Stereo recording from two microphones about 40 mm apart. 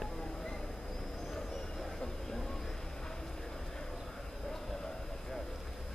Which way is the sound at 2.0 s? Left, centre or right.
Centre.